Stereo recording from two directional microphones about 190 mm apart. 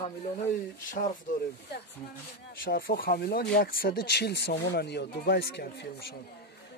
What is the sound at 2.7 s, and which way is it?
Speech, 50° left (ahead or behind).